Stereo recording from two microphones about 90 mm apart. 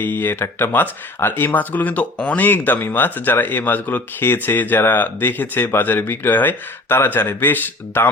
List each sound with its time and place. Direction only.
0.0 s speech: 25° left (ahead or behind)